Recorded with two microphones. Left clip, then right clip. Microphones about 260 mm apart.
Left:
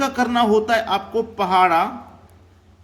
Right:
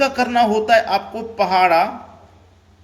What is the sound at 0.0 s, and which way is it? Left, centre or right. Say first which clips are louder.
Speech: right 3 dB; centre.